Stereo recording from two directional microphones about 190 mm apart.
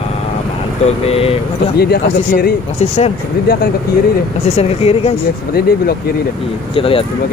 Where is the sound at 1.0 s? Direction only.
30° left (ahead or behind).